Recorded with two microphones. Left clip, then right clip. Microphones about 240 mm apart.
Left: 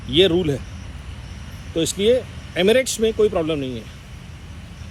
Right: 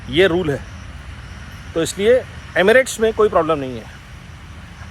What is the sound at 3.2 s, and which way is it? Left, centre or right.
Speech, centre.